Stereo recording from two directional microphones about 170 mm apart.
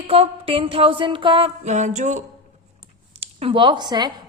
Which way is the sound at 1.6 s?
45° right (ahead or behind).